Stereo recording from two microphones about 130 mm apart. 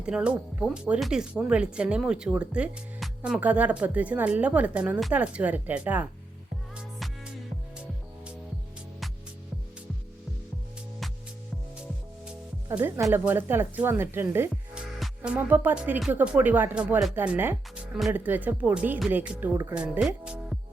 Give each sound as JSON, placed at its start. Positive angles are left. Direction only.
{"t": 0.0, "sound": "speech", "side_deg": -5}
{"t": 7.0, "sound": "music", "side_deg": 0}
{"t": 13.1, "sound": "speech", "side_deg": -15}
{"t": 14.5, "sound": "music", "side_deg": -5}
{"t": 16.0, "sound": "speech", "side_deg": -10}